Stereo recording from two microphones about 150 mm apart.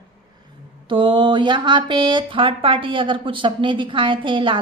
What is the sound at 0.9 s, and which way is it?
Speech, 35° right (ahead or behind).